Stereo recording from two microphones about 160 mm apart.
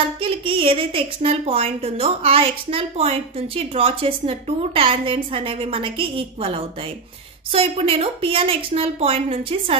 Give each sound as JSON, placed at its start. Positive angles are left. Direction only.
{"t": 0.0, "sound": "a woman's voice", "side_deg": -35}